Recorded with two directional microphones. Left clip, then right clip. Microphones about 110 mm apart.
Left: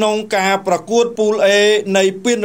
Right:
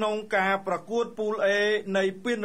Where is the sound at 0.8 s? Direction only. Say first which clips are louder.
Left 14 dB; 30° left (ahead or behind).